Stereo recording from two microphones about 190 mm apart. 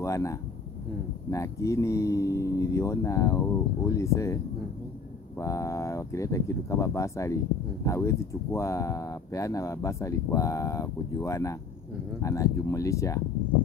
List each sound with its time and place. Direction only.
0.0 s a sound: 15° left (ahead or behind)
1.3 s speech: 15° left (ahead or behind)
5.4 s speech: 15° left (ahead or behind)